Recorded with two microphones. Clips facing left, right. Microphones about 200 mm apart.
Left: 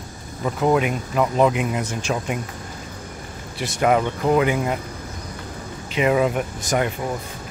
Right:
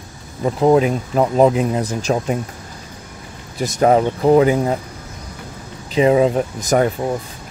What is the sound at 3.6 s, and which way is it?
Speech, 40° right (ahead or behind).